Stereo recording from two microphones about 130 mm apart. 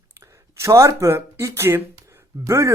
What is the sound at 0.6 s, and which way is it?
Speech, 25° right (ahead or behind).